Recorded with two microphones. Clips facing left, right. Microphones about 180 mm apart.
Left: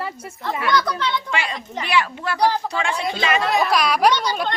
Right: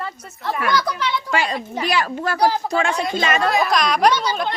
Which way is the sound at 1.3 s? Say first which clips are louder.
Right 4 dB; 40° right (ahead or behind).